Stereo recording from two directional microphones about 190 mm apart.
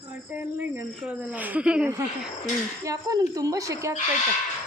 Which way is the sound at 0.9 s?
10° right (ahead or behind).